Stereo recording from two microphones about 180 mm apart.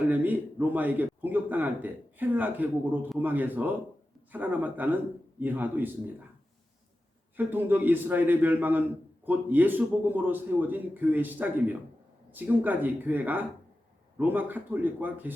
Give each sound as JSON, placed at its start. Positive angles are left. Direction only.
{"t": 0.1, "sound": "a man's voice", "side_deg": -10}
{"t": 7.3, "sound": "a man's voice", "side_deg": -10}